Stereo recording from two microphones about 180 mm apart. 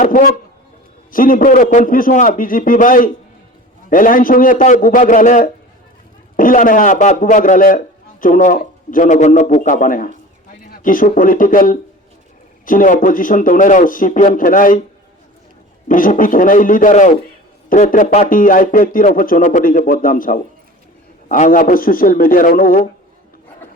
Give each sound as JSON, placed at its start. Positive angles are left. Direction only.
{"t": 0.0, "sound": "a man's voice", "side_deg": 50}
{"t": 15.9, "sound": "speech", "side_deg": 50}